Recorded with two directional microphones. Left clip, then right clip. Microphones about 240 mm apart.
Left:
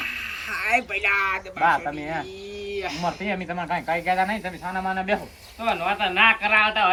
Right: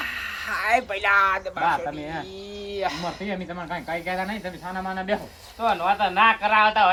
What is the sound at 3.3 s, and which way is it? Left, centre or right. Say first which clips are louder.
Speech: left 4 dB; centre.